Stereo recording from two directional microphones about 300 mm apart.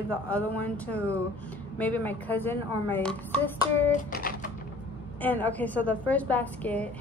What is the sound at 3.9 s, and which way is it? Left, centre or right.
Typing, left.